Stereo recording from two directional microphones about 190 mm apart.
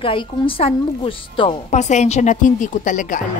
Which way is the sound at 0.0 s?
30° left (ahead or behind).